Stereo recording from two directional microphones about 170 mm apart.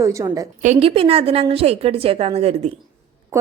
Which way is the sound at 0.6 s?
40° right (ahead or behind).